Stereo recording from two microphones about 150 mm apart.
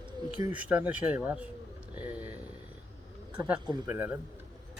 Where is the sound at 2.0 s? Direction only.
10° right (ahead or behind).